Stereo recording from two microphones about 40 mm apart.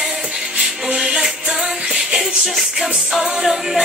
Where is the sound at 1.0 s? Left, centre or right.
Centre.